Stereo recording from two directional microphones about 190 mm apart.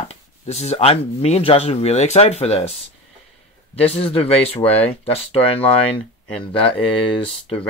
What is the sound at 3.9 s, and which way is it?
Speech, 30° left (ahead or behind).